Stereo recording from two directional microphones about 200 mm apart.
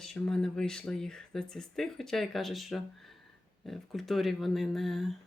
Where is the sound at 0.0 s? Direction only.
5° left (ahead or behind).